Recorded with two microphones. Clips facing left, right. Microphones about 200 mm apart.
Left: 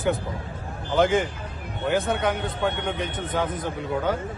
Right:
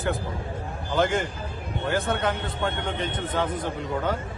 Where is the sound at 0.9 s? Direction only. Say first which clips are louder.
Left 3 dB; 15° left (ahead or behind).